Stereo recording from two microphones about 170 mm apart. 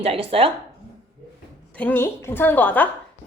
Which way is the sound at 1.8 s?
10° left (ahead or behind).